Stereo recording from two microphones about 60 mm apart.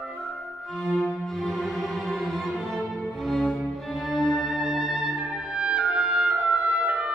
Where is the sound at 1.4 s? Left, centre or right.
Centre.